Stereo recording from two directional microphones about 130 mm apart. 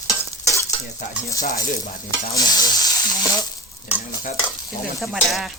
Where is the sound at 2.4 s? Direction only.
30° left (ahead or behind).